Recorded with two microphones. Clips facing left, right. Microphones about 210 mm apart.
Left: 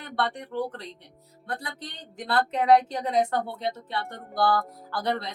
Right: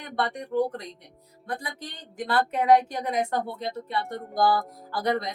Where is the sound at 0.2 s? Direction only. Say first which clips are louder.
Right 3 dB; 10° right (ahead or behind).